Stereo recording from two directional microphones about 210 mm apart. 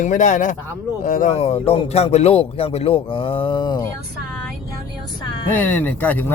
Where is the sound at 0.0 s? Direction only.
35° left (ahead or behind).